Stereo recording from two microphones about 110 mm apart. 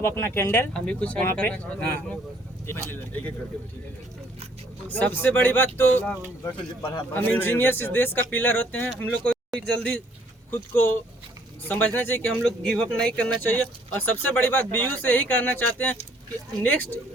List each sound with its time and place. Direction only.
0.0 s speech: 20° left (ahead or behind)
0.7 s speech: 10° left (ahead or behind)
4.9 s speech: 15° left (ahead or behind)
8.9 s speech: 5° left (ahead or behind)
12.6 s speech: 5° left (ahead or behind)